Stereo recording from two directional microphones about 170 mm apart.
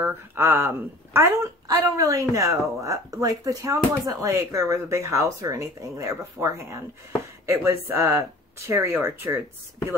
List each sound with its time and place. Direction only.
0.0 s speech: 10° right (ahead or behind)